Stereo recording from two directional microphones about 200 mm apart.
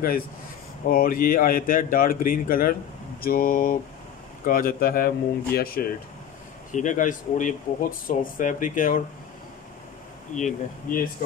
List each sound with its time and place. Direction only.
0.8 s speech: 45° left (ahead or behind)
6.7 s speech: 40° left (ahead or behind)
10.3 s speech: 40° left (ahead or behind)